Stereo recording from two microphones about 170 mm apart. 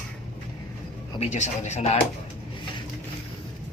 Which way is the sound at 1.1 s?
40° left (ahead or behind).